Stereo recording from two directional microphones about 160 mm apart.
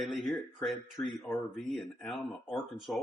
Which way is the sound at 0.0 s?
Centre (ahead or behind).